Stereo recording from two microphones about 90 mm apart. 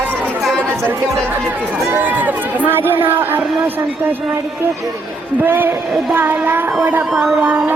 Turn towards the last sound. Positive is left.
turn(degrees=-5)  # may be behind; listen again after turning